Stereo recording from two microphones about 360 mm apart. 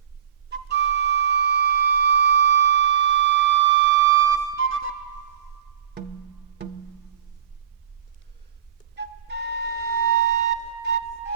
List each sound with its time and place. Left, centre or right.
0.5 s flute: right
9.0 s flute: right